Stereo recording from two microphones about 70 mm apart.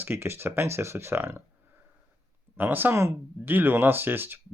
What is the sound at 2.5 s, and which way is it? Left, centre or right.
Speech, right.